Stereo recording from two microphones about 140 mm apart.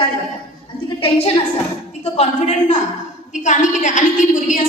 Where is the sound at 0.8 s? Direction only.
45° left (ahead or behind).